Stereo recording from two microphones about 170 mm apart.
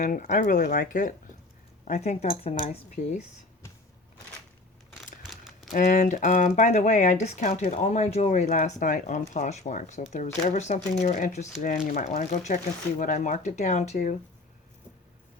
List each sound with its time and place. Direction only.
0.0 s speech: 50° left (ahead or behind)
5.2 s crumpling: centre (ahead or behind)
5.7 s speech: 45° left (ahead or behind)
11.9 s speech: 55° left (ahead or behind)